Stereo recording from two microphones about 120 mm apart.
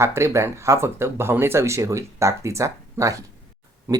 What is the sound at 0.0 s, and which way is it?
Speech, 20° right (ahead or behind).